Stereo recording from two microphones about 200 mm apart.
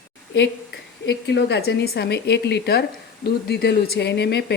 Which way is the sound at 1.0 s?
60° left (ahead or behind).